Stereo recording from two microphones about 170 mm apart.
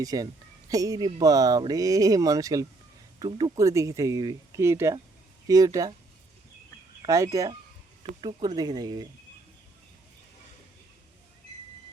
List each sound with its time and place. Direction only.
0.0 s speech: 20° right (ahead or behind)
7.0 s speech: 20° right (ahead or behind)